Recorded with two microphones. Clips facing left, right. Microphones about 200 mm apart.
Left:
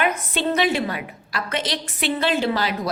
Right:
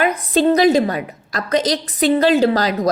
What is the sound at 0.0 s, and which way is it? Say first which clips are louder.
A woman's voice: right 7 dB; 35° right (ahead or behind).